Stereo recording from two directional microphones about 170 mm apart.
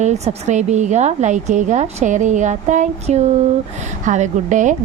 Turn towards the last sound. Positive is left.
turn(degrees=-45)  # may be behind; listen again after turning